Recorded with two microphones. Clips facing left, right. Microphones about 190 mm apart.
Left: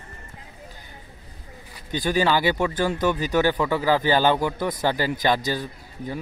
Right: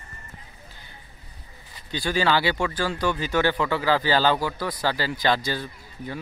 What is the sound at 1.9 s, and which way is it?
Speech, 15° left (ahead or behind).